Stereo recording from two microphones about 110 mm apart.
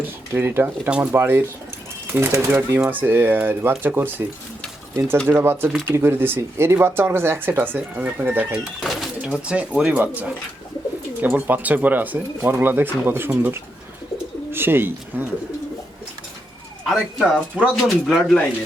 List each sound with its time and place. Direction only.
0.3 s speech: 20° right (ahead or behind)
5.4 s speech: 20° right (ahead or behind)
8.8 s speech: 5° right (ahead or behind)
16.8 s speech: centre (ahead or behind)